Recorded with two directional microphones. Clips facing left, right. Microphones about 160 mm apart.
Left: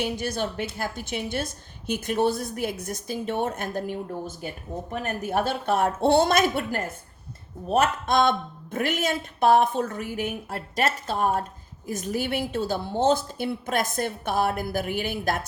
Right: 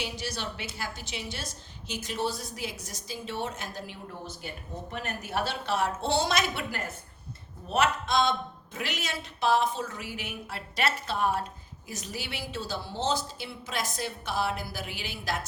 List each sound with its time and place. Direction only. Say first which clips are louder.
0.0 s a woman's voice: left 8 dB; 55° left (ahead or behind)